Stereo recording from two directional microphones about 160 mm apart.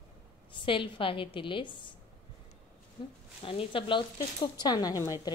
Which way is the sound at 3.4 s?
35° left (ahead or behind).